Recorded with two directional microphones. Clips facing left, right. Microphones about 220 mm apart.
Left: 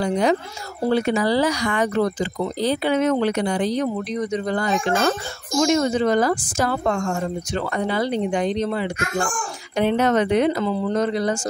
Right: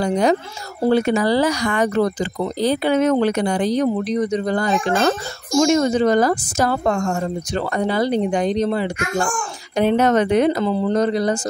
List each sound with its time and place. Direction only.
0.0 s speech: 40° right (ahead or behind)